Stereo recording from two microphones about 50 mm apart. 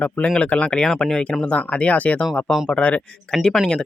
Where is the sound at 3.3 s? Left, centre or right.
Centre.